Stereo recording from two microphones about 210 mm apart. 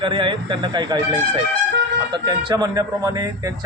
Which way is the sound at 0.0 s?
25° right (ahead or behind).